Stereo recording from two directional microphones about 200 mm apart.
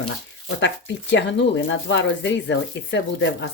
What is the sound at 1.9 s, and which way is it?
Speech, 65° left (ahead or behind).